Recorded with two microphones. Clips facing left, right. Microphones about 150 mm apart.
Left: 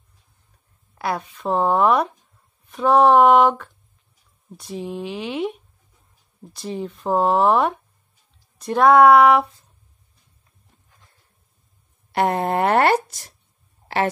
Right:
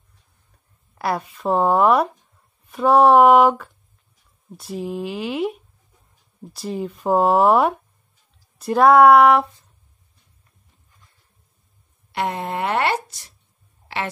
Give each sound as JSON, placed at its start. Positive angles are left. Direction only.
{"t": 0.9, "sound": "speech", "side_deg": 0}
{"t": 12.1, "sound": "speech", "side_deg": 45}